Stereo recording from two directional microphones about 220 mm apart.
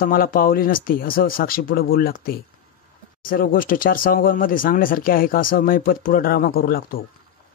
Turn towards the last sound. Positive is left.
turn(degrees=45)  # may be behind; listen again after turning